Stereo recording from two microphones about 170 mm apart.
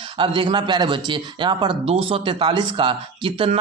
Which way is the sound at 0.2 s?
30° right (ahead or behind).